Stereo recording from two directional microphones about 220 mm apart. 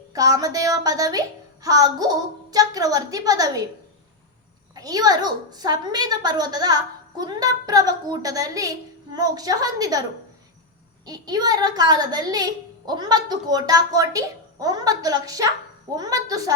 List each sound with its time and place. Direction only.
0.1 s a woman's voice: 15° right (ahead or behind)
4.7 s a woman's voice: 15° right (ahead or behind)
11.0 s a woman's voice: 15° right (ahead or behind)